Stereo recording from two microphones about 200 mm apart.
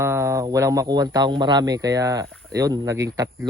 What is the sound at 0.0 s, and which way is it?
Speech, 15° right (ahead or behind).